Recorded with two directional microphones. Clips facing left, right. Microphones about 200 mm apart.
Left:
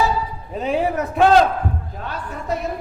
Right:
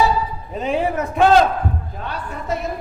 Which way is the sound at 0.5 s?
40° left (ahead or behind).